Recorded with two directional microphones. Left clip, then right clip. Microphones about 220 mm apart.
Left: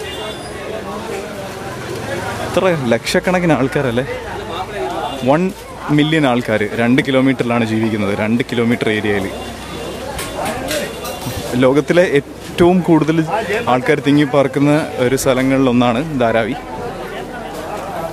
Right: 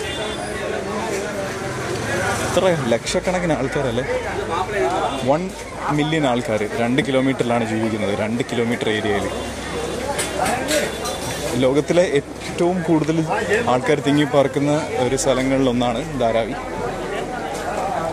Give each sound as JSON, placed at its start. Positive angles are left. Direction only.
{"t": 2.5, "sound": "a man's voice", "side_deg": 25}
{"t": 5.9, "sound": "a man's voice", "side_deg": 25}
{"t": 11.6, "sound": "a man's voice", "side_deg": 25}